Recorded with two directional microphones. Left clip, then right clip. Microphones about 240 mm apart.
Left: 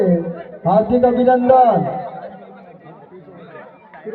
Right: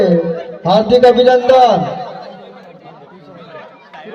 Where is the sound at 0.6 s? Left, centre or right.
Right.